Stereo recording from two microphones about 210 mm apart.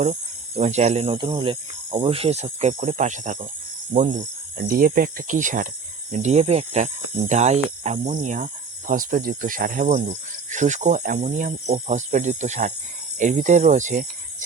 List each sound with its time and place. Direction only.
0.0 s speech: 35° right (ahead or behind)